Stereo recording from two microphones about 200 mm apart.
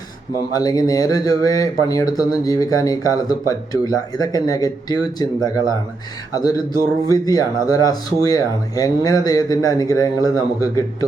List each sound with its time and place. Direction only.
0.5 s speech: 20° left (ahead or behind)